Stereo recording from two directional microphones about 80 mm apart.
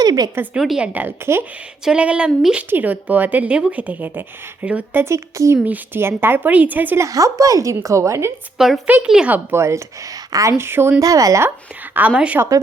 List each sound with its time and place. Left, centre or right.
0.0 s a sound: right
0.5 s a woman's voice: centre
0.8 s speech: right
1.8 s speech: centre
2.6 s speech: right
5.0 s a woman's voice: right
5.6 s speech: right
7.0 s a woman's voice: right
8.5 s a woman's voice: centre
9.3 s a woman's voice: right
10.6 s a woman's voice: right
11.0 s a woman's voice: right
11.9 s speech: centre